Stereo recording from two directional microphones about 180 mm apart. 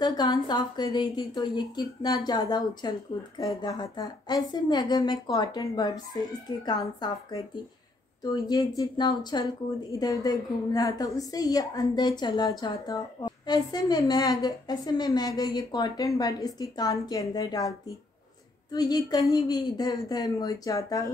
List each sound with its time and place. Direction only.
0.0 s speech: 25° left (ahead or behind)